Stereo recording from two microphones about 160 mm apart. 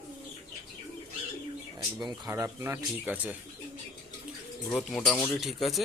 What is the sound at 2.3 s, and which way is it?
Speech, 15° right (ahead or behind).